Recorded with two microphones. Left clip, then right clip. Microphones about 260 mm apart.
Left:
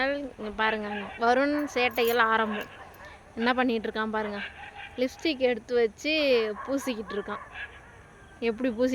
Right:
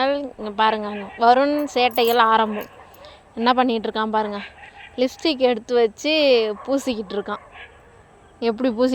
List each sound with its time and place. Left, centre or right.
0.0 s a woman's voice: centre